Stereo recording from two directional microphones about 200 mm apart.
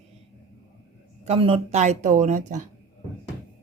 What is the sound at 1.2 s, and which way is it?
Speech, 30° right (ahead or behind).